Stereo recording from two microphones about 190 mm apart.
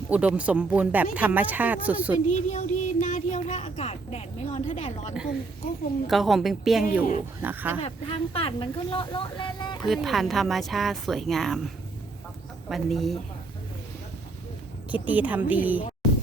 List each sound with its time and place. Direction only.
0.1 s speech: 5° right (ahead or behind)
2.3 s speech: 40° left (ahead or behind)
6.1 s speech: centre (ahead or behind)
7.8 s speech: 30° left (ahead or behind)
9.9 s speech: centre (ahead or behind)
15.0 s speech: 10° right (ahead or behind)